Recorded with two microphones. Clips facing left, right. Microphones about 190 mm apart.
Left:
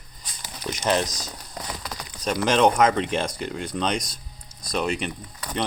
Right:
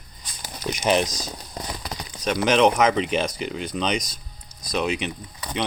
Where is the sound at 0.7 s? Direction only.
15° right (ahead or behind).